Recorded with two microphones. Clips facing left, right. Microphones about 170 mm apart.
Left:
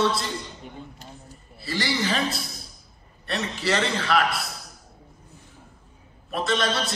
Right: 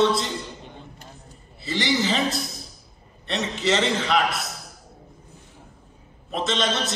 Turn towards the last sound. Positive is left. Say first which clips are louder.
# even
turn(degrees=-20)  # may be behind; listen again after turning